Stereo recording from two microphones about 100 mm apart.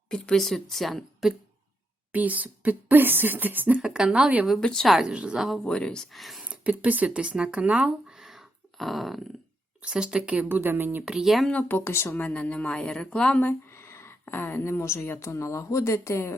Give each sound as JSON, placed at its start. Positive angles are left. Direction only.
{"t": 0.1, "sound": "a woman's voice", "side_deg": 10}
{"t": 2.1, "sound": "speech", "side_deg": -15}
{"t": 3.8, "sound": "speech", "side_deg": -5}
{"t": 4.4, "sound": "a woman's voice", "side_deg": 5}
{"t": 5.0, "sound": "speech", "side_deg": -10}
{"t": 5.5, "sound": "speech", "side_deg": 10}
{"t": 11.0, "sound": "a woman's voice", "side_deg": -5}
{"t": 11.5, "sound": "speech", "side_deg": 20}
{"t": 12.2, "sound": "speech", "side_deg": 15}
{"t": 13.4, "sound": "speech", "side_deg": 25}